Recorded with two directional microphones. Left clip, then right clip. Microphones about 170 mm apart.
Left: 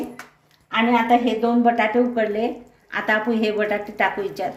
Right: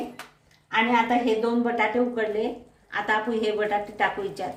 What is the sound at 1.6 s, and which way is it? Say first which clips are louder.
A woman's voice: left 5 dB; 45° left (ahead or behind).